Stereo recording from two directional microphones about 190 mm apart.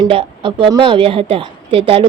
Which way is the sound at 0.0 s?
25° right (ahead or behind).